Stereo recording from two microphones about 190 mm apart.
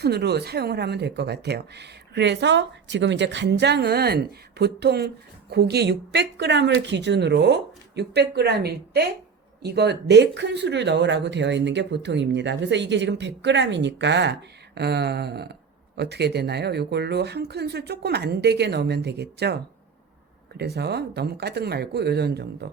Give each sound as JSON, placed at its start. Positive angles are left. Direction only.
{"t": 0.0, "sound": "speech", "side_deg": -60}
{"t": 20.6, "sound": "speech", "side_deg": -60}